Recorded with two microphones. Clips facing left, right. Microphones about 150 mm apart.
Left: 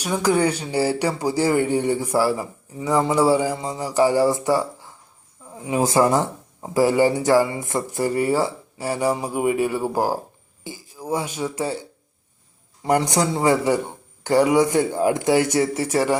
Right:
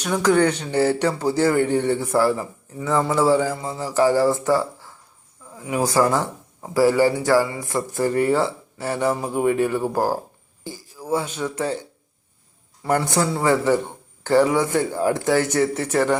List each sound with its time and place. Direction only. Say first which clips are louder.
0.0 s speech: right 2 dB; 10° left (ahead or behind)
12.8 s speech: left 1 dB; 15° left (ahead or behind)